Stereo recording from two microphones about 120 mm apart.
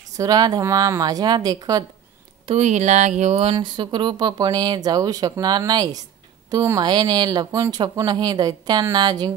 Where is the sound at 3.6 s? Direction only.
40° right (ahead or behind).